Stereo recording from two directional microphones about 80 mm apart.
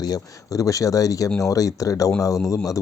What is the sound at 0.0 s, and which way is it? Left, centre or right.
Speech, left.